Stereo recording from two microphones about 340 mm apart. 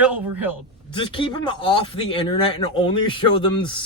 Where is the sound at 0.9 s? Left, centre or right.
Centre.